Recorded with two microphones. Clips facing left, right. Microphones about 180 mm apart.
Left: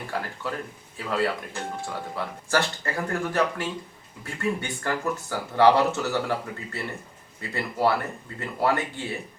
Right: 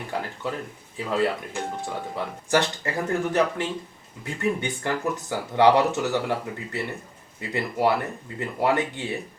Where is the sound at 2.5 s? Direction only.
15° right (ahead or behind).